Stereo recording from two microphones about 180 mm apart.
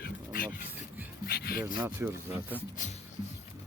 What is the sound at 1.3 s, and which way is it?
Rub, 60° left (ahead or behind).